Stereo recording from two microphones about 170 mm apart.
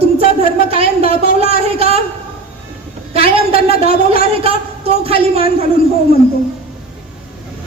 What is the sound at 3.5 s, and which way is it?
A man's voice, 35° right (ahead or behind).